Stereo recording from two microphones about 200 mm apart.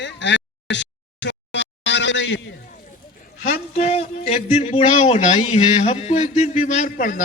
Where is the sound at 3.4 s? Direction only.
40° left (ahead or behind).